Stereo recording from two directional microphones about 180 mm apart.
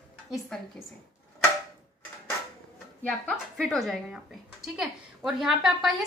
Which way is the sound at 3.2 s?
Centre (ahead or behind).